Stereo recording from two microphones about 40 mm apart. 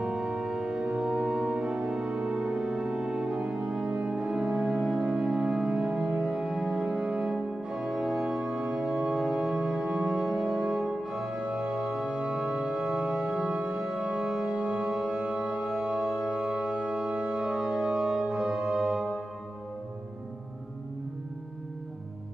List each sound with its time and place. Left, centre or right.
0.0 s music: right
1.0 s music: centre
7.7 s organ: centre
14.6 s music: right
14.9 s music: centre
15.1 s music: right